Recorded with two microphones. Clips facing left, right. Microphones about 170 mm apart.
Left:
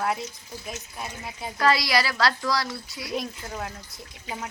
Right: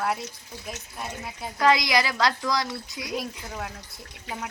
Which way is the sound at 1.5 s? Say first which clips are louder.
Right 1 dB; 20° right (ahead or behind).